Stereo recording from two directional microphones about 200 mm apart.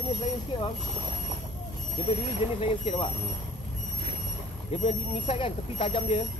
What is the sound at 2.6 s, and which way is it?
Speech, 30° left (ahead or behind).